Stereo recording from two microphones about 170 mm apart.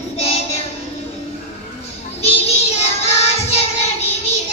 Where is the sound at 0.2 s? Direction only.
35° left (ahead or behind).